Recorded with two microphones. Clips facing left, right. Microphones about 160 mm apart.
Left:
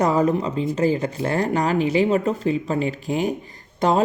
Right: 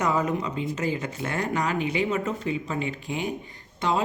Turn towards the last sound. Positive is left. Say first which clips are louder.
# left 6 dB
turn(degrees=40)  # may be behind; listen again after turning